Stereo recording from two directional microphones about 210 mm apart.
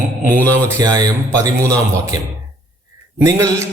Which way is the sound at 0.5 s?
15° right (ahead or behind).